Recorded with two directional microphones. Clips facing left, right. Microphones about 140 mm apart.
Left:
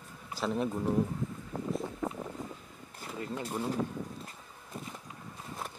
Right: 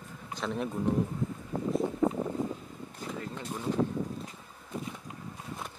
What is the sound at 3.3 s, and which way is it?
Speech, 5° left (ahead or behind).